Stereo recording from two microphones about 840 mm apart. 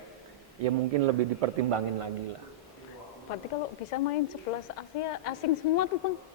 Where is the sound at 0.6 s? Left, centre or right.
Right.